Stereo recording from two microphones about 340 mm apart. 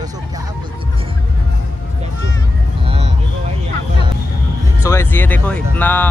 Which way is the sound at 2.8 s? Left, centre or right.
Centre.